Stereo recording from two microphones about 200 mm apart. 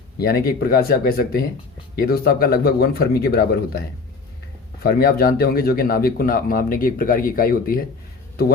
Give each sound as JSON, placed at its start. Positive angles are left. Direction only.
{"t": 0.2, "sound": "speech", "side_deg": 50}